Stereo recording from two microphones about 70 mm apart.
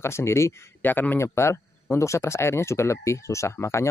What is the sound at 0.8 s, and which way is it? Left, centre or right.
Speech, left.